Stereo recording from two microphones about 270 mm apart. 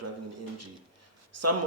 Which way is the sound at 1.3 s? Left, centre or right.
Right.